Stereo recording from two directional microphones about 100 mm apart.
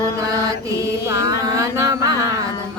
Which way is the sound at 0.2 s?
35° right (ahead or behind).